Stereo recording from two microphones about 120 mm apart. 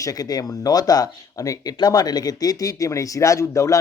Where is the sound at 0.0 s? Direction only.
30° left (ahead or behind).